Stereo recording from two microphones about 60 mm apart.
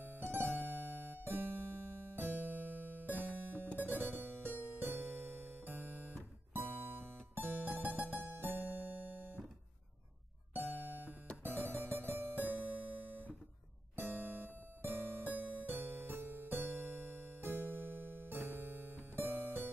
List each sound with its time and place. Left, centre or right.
0.2 s music: right
10.5 s music: right